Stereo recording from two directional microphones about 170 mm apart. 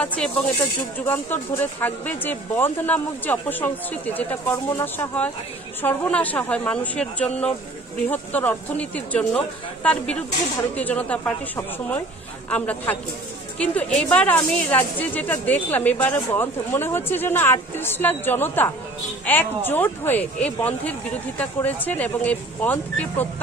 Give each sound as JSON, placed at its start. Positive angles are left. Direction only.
{"t": 0.0, "sound": "speech", "side_deg": 5}
{"t": 10.8, "sound": "speech", "side_deg": 10}